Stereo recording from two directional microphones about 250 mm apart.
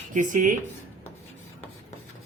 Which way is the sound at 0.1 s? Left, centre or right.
Right.